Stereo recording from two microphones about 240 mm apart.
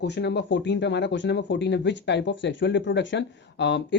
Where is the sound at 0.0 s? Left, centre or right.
Left.